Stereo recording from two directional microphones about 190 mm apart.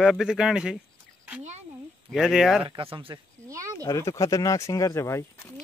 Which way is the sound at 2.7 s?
30° right (ahead or behind).